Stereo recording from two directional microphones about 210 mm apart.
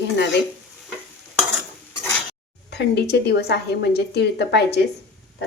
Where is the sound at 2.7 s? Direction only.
55° left (ahead or behind).